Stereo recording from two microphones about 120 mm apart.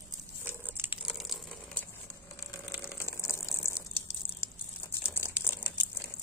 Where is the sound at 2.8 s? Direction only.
20° left (ahead or behind).